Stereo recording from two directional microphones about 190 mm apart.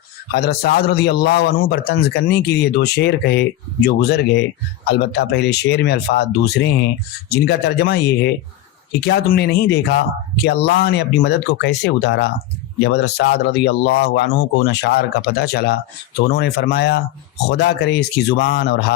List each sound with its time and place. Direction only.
0.3 s a man's voice: 55° left (ahead or behind)